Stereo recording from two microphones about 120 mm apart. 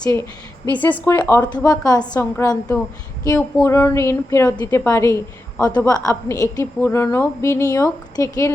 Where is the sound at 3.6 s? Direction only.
25° left (ahead or behind).